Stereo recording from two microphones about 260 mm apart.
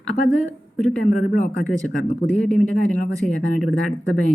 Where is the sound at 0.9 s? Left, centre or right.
Centre.